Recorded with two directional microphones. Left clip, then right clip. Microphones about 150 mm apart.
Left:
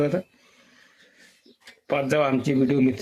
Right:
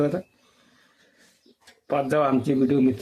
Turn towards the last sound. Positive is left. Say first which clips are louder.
# even
turn(degrees=25)  # may be behind; listen again after turning